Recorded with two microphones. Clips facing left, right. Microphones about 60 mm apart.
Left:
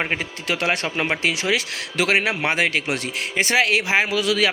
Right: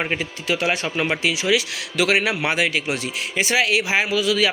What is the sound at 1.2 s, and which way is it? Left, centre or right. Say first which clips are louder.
A man's voice: right 1 dB; left.